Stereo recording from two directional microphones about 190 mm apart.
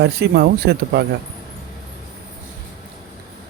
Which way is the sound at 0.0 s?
60° right (ahead or behind).